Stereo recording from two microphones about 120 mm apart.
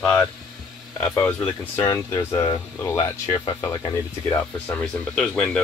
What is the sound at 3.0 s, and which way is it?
Speech, 40° left (ahead or behind).